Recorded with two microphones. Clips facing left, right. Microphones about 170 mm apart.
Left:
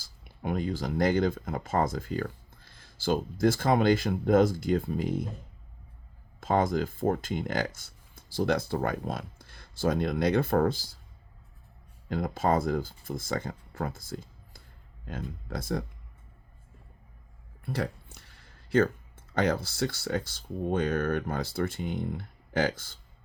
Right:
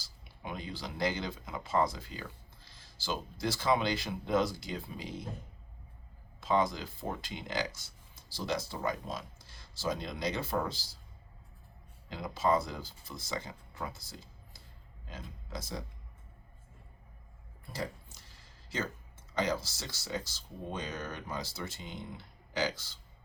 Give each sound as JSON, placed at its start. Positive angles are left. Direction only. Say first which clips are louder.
{"t": 0.0, "sound": "speech", "louder": "left 9 dB", "side_deg": 50}
{"t": 6.4, "sound": "speech", "louder": "left 4 dB", "side_deg": 50}
{"t": 12.0, "sound": "speech", "louder": "left 4 dB", "side_deg": 50}
{"t": 17.6, "sound": "a sound", "louder": "left 7 dB", "side_deg": 65}
{"t": 19.3, "sound": "speech", "louder": "left 5 dB", "side_deg": 55}